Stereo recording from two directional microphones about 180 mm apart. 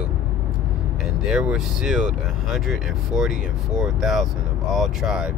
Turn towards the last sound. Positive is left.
turn(degrees=-5)  # may be behind; listen again after turning